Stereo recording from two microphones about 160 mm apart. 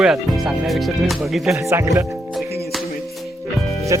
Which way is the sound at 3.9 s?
20° right (ahead or behind).